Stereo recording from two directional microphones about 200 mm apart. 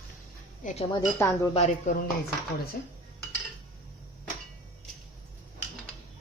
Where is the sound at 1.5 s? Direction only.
35° left (ahead or behind).